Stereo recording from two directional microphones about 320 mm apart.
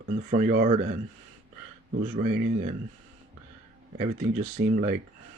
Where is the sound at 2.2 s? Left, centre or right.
Right.